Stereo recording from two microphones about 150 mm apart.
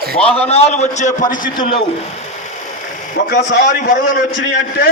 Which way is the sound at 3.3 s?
65° left (ahead or behind).